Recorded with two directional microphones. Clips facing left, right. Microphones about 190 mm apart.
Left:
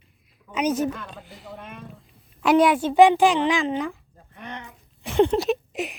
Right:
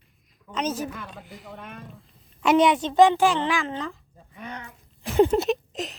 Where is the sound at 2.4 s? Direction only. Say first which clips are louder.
Left 1 dB; centre (ahead or behind).